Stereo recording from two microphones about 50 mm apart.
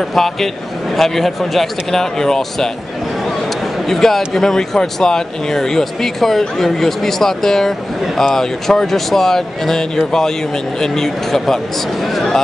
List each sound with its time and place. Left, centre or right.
0.1 s a man's voice: centre
3.8 s speech: centre